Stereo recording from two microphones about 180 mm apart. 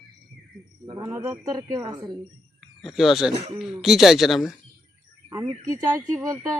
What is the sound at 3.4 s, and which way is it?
Speech, 35° right (ahead or behind).